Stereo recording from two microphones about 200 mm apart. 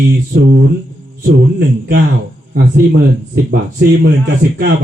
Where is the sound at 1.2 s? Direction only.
50° right (ahead or behind).